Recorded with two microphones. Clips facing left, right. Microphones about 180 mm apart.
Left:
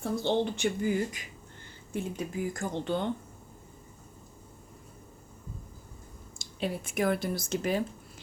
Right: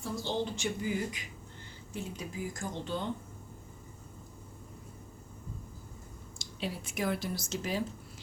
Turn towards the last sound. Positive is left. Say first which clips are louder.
# left 5 dB
turn(degrees=55)  # may be behind; listen again after turning